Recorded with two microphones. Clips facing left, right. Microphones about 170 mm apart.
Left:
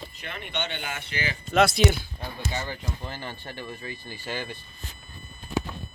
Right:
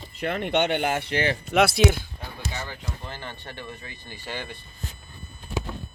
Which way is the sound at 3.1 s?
10° left (ahead or behind).